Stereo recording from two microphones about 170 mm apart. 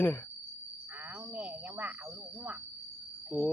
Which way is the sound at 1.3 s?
10° right (ahead or behind).